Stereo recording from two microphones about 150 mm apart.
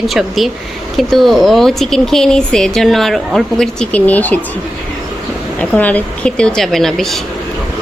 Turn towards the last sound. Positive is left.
turn(degrees=0)  # may be behind; listen again after turning